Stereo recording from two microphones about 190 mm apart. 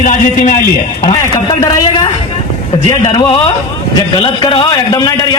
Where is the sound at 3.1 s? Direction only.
30° left (ahead or behind).